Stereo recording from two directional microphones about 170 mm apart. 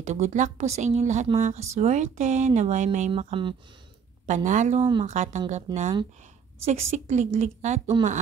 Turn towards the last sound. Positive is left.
turn(degrees=-40)  # may be behind; listen again after turning